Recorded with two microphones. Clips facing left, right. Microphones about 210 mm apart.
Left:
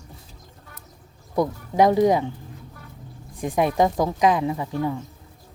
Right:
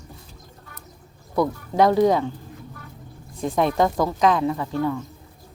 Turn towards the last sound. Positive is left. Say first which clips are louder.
# right 1 dB
turn(degrees=15)  # may be behind; listen again after turning